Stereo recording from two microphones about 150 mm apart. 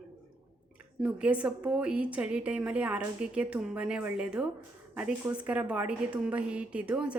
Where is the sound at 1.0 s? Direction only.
10° right (ahead or behind).